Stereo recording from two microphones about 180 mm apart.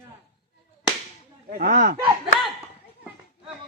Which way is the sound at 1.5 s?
50° right (ahead or behind).